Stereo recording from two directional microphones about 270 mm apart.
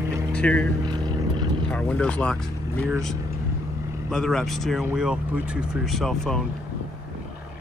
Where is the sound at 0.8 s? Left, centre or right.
Centre.